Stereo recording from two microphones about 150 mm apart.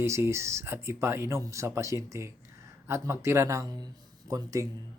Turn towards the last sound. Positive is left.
turn(degrees=-20)  # may be behind; listen again after turning